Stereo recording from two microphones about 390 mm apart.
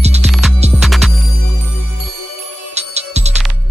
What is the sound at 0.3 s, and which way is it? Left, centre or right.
Music, centre.